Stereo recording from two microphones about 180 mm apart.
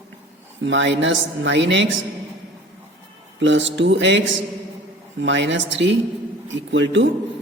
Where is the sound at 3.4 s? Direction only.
90° right.